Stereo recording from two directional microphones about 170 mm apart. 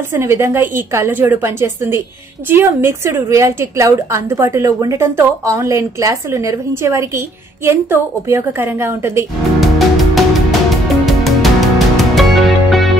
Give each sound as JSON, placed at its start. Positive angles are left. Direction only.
{"t": 0.2, "sound": "a woman's voice", "side_deg": -15}
{"t": 9.6, "sound": "music", "side_deg": 0}